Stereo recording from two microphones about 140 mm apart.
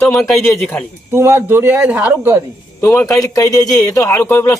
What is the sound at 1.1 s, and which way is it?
Speech, 20° right (ahead or behind).